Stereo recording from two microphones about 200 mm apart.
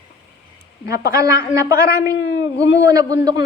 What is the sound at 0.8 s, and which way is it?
Speech, 50° left (ahead or behind).